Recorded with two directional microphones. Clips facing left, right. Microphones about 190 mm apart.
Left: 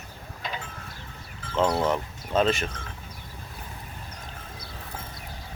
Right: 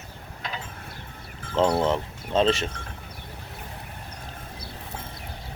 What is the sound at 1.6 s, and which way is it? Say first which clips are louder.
Speech: right 2 dB; 30° right (ahead or behind).